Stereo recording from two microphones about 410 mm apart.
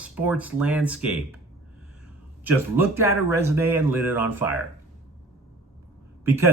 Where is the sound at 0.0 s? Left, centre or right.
Centre.